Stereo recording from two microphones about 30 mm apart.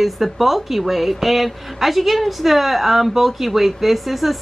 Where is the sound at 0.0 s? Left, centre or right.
Centre.